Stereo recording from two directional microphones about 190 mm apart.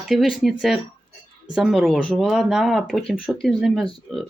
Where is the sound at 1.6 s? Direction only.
Centre (ahead or behind).